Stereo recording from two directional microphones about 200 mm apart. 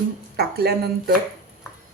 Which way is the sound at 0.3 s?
50° right (ahead or behind).